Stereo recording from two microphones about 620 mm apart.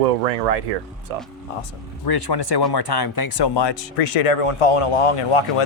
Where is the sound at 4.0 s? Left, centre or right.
Left.